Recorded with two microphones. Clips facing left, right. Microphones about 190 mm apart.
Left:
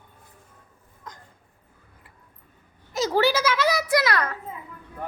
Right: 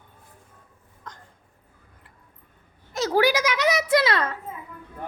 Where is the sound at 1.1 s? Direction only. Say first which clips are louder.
Even; 10° left (ahead or behind).